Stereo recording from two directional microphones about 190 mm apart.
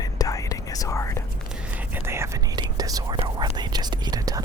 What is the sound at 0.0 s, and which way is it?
Whispering, 20° left (ahead or behind).